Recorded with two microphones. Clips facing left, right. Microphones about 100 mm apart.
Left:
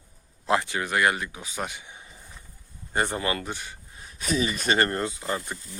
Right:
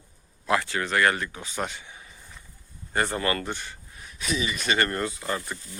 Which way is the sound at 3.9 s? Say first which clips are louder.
Left 3 dB; 35° left (ahead or behind).